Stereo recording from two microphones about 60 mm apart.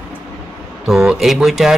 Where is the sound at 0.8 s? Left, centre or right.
Centre.